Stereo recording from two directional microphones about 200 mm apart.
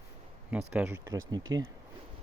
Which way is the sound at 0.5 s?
5° right (ahead or behind).